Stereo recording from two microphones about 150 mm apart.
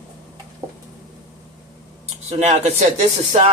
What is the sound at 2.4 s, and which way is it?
Speech, 50° right (ahead or behind).